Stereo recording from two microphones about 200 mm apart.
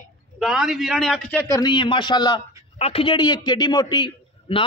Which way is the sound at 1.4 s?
15° left (ahead or behind).